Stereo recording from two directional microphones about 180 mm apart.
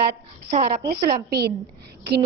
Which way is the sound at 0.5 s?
40° right (ahead or behind).